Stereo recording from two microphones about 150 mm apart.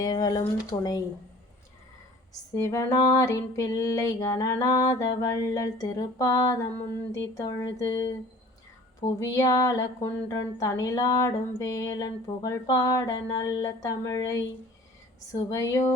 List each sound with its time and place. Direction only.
0.0 s speech: 25° left (ahead or behind)
2.6 s speech: 20° left (ahead or behind)
9.0 s speech: 20° left (ahead or behind)